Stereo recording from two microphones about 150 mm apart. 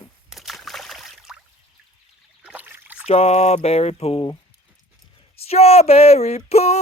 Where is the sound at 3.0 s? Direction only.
45° left (ahead or behind).